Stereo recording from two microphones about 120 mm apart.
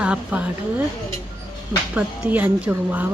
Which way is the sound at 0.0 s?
10° right (ahead or behind).